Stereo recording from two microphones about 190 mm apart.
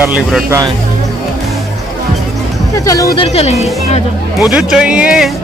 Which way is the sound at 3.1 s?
35° left (ahead or behind).